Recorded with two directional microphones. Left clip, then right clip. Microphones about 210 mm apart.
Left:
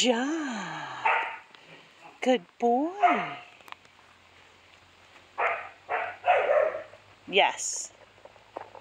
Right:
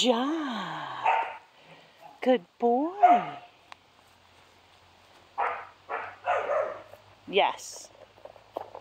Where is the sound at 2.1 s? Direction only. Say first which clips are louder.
Right 1 dB; 5° left (ahead or behind).